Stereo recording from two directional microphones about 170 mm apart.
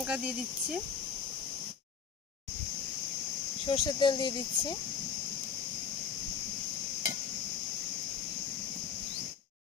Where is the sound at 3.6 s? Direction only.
25° left (ahead or behind).